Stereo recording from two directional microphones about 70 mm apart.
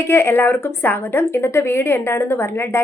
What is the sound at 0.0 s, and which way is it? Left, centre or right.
A woman's voice, left.